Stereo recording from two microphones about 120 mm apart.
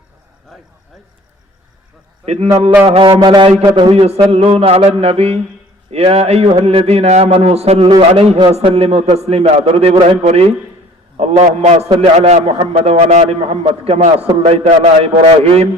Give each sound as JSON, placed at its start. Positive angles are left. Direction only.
{"t": 0.5, "sound": "speech", "side_deg": 0}
{"t": 2.2, "sound": "a man's voice", "side_deg": -60}
{"t": 3.1, "sound": "a man's voice", "side_deg": -35}
{"t": 4.3, "sound": "a man's voice", "side_deg": -55}
{"t": 8.4, "sound": "a man's voice", "side_deg": -50}